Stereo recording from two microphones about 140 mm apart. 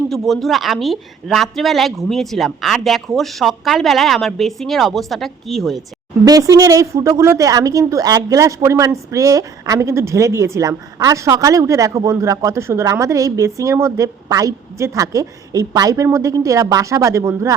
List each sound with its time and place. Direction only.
0.1 s a woman's voice: centre (ahead or behind)
6.2 s a woman's voice: 25° right (ahead or behind)